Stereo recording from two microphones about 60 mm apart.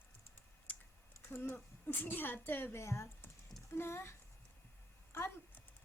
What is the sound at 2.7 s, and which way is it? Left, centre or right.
Speech, left.